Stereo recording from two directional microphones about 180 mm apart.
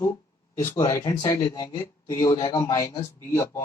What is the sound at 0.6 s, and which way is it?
Speech, 15° left (ahead or behind).